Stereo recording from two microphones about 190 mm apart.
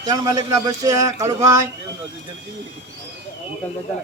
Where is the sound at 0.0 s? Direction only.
20° right (ahead or behind).